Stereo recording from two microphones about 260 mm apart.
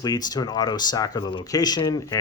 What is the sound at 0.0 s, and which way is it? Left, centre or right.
Speech, centre.